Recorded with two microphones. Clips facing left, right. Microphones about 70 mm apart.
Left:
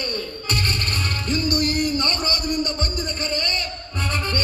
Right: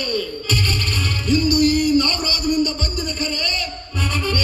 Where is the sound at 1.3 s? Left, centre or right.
Left.